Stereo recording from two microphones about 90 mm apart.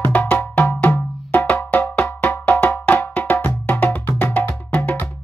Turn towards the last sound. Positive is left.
turn(degrees=15)  # may be behind; listen again after turning